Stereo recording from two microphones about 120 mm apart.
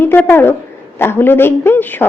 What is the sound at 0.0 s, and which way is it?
A woman's voice, 20° left (ahead or behind).